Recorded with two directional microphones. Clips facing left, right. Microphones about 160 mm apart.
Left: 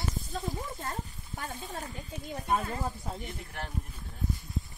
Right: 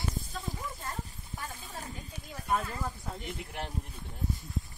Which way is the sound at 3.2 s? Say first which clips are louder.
Right 2 dB; 20° right (ahead or behind).